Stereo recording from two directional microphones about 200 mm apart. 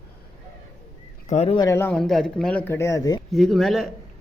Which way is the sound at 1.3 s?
30° left (ahead or behind).